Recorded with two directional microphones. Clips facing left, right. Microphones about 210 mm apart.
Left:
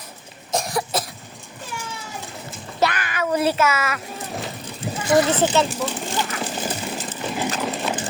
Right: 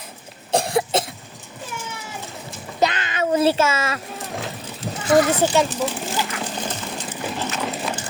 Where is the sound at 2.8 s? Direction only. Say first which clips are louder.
Right 1 dB; 25° right (ahead or behind).